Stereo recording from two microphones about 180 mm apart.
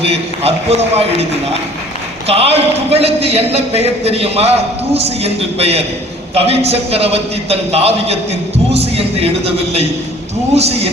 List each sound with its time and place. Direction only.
0.0 s a man's voice: 35° right (ahead or behind)
2.2 s a man's voice: 35° right (ahead or behind)